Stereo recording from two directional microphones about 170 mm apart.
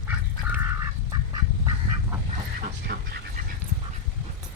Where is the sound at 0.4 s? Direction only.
15° right (ahead or behind).